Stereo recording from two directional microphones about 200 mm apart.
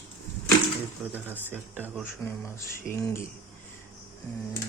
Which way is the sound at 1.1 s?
10° right (ahead or behind).